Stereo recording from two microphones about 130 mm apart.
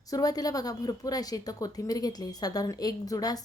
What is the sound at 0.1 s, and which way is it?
A woman's voice, 30° left (ahead or behind).